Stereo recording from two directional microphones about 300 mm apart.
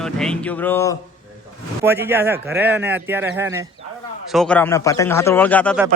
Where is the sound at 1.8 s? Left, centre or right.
Centre.